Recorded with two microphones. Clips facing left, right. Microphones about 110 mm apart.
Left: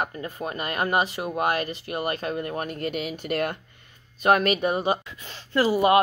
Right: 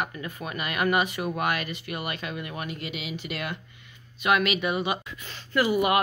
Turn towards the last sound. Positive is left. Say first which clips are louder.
# left 3 dB
turn(degrees=30)  # may be behind; listen again after turning